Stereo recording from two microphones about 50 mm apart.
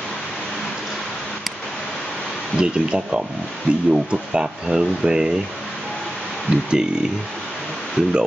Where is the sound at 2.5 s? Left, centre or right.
Centre.